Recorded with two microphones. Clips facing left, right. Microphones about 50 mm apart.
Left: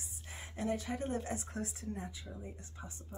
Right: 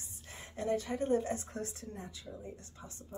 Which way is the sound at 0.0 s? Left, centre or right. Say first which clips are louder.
Left 1 dB; centre.